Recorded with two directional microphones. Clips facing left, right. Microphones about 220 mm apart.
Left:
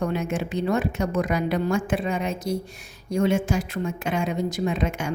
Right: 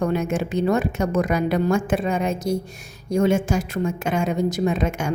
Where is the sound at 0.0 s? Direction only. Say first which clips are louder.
Right 4 dB; 45° right (ahead or behind).